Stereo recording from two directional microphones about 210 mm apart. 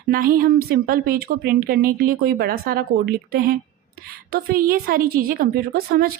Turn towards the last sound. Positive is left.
turn(degrees=-45)  # may be behind; listen again after turning